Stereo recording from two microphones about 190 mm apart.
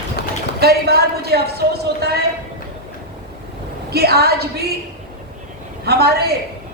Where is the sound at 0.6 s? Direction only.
55° right (ahead or behind).